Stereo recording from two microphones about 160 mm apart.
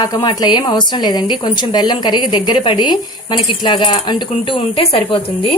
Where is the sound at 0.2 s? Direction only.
25° left (ahead or behind).